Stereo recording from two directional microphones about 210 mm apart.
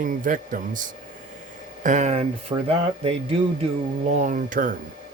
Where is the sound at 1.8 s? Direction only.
35° right (ahead or behind).